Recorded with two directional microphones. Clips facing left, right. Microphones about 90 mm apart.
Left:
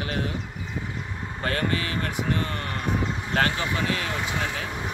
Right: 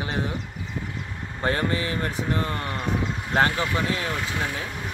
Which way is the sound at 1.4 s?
25° right (ahead or behind).